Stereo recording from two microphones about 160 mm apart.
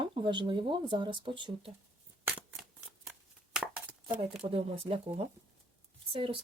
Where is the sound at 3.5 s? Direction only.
Centre (ahead or behind).